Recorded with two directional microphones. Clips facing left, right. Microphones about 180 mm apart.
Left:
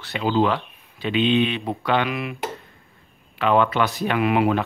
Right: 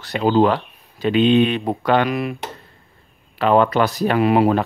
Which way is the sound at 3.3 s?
40° right (ahead or behind).